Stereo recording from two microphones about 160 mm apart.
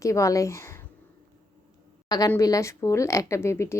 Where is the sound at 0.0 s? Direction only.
20° left (ahead or behind).